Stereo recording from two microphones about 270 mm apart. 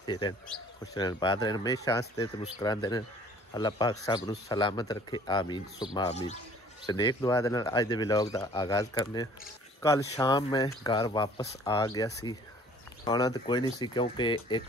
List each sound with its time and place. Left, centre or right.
0.0 s speech: centre